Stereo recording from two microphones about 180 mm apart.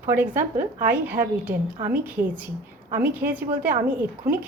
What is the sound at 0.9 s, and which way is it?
Speech, 10° right (ahead or behind).